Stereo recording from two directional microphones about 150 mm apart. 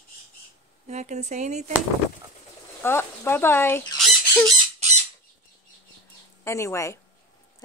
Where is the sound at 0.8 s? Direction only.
50° right (ahead or behind).